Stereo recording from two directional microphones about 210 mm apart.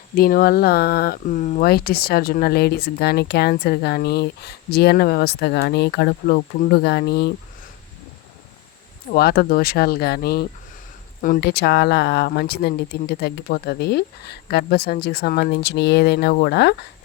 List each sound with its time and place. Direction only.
0.2 s speech: 45° left (ahead or behind)
9.0 s speech: 45° left (ahead or behind)